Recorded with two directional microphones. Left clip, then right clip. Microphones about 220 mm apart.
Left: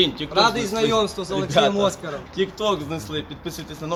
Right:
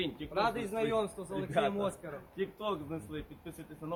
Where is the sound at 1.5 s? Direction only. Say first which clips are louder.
Left 13 dB; 5° left (ahead or behind).